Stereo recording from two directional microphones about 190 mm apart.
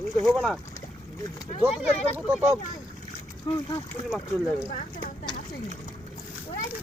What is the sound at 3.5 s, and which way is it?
Speech, 25° left (ahead or behind).